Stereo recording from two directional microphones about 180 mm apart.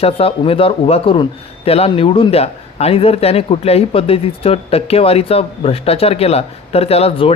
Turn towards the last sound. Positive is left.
turn(degrees=35)  # may be behind; listen again after turning